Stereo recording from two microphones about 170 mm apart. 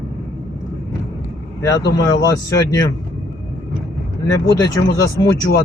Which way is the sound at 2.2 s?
20° left (ahead or behind).